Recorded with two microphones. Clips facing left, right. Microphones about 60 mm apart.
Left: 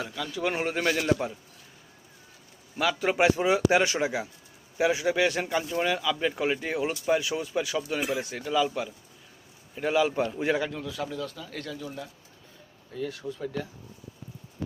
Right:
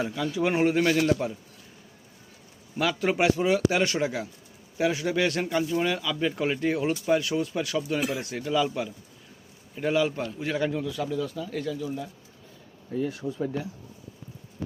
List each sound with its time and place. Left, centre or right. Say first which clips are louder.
0.0 s speech: right 4 dB; centre
2.7 s speech: even; centre
3.2 s a man's voice: left 1 dB; centre
10.7 s speech: right 4 dB; centre
13.2 s speech: right 4 dB; right